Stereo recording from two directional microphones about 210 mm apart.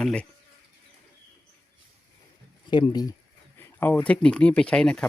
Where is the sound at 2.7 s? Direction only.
20° left (ahead or behind).